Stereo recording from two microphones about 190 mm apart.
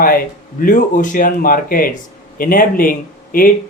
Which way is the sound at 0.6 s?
45° left (ahead or behind).